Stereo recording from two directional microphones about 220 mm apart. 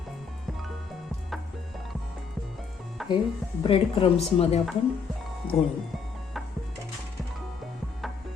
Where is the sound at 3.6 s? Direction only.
25° left (ahead or behind).